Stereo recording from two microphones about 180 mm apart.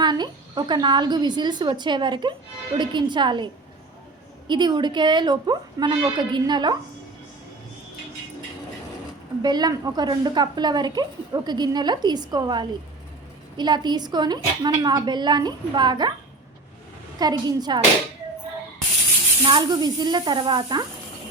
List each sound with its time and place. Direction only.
0.0 s a woman's voice: 25° right (ahead or behind)
9.4 s a woman's voice: 25° right (ahead or behind)
17.2 s a woman's voice: 20° right (ahead or behind)
19.5 s a woman's voice: 25° right (ahead or behind)